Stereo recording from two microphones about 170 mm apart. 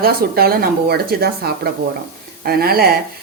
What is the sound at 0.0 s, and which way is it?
Speech, 65° right (ahead or behind).